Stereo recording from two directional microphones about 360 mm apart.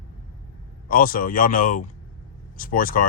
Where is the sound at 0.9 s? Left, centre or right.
Left.